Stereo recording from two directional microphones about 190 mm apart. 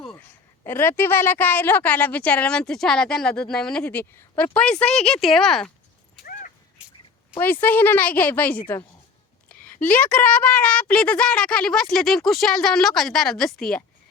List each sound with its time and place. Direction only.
0.6 s a woman's voice: 10° left (ahead or behind)
6.2 s a sound: 45° left (ahead or behind)
7.3 s a woman's voice: 10° left (ahead or behind)